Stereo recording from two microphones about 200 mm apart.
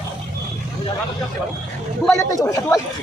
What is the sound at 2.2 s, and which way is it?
Speech, 15° left (ahead or behind).